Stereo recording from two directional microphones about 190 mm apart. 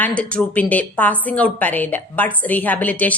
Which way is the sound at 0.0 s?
5° left (ahead or behind).